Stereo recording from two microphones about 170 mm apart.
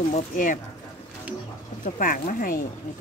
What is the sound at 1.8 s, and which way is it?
Speech, 55° left (ahead or behind).